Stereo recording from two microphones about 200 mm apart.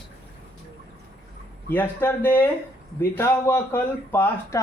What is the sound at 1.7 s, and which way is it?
Speech, 10° left (ahead or behind).